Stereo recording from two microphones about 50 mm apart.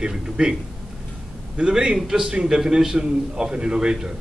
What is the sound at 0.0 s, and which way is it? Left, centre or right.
Speech, centre.